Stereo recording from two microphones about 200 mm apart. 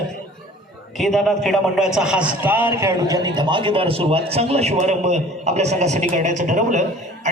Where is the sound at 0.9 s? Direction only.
Centre (ahead or behind).